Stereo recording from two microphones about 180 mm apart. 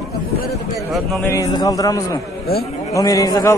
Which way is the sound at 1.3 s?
20° left (ahead or behind).